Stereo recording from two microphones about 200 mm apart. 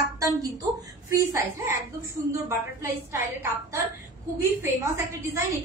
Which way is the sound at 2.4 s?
15° right (ahead or behind).